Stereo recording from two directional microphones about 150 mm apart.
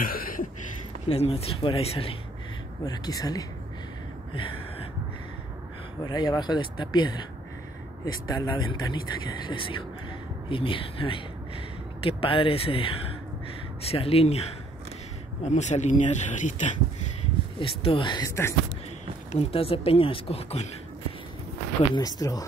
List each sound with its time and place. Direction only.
0.0 s a sound: 70° left (ahead or behind)
1.0 s speech: 40° left (ahead or behind)
2.8 s speech: 25° left (ahead or behind)
6.0 s speech: 30° left (ahead or behind); by 16.7 s 55° left (ahead or behind)
17.6 s speech: 35° left (ahead or behind)
19.3 s speech: 40° left (ahead or behind)
21.9 s speech: 25° left (ahead or behind)